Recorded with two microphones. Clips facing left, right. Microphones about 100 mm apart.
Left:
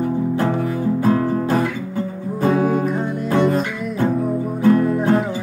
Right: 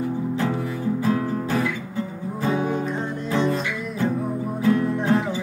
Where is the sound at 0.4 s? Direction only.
55° left (ahead or behind).